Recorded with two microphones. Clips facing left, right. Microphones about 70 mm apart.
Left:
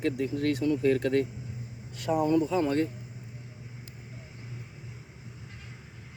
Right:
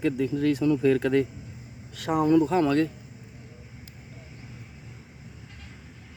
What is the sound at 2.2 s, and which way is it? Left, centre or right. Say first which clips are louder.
Speech: right 5 dB; right.